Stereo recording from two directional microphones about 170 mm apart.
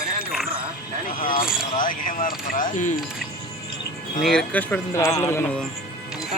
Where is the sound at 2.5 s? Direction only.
50° left (ahead or behind).